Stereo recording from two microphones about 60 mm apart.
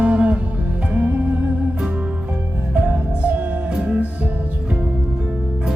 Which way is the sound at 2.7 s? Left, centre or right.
Right.